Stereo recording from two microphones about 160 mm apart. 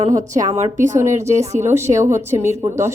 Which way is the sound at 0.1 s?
20° right (ahead or behind).